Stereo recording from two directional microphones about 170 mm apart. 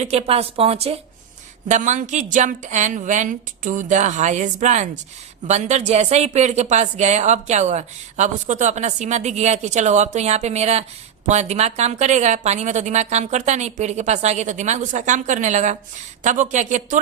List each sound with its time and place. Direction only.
0.0 s a woman's voice: 40° right (ahead or behind)